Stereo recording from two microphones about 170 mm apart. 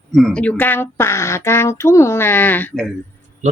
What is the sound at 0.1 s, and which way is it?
Speech, centre (ahead or behind).